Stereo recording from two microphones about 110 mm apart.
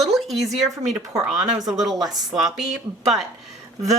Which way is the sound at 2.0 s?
35° right (ahead or behind).